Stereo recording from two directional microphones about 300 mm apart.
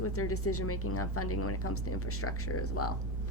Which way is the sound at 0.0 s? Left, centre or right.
Left.